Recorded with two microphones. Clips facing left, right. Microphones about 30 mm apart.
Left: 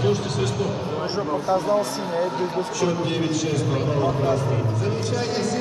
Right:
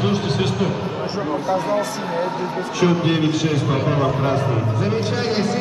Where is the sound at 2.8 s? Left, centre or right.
Right.